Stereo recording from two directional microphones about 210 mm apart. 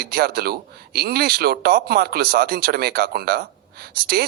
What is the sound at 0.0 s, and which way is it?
Speech, 45° right (ahead or behind).